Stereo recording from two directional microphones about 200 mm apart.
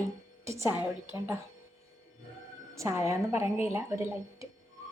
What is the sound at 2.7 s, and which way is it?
A woman's voice, 15° right (ahead or behind).